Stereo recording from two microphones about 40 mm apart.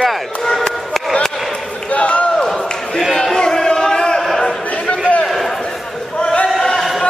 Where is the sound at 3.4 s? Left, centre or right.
Centre.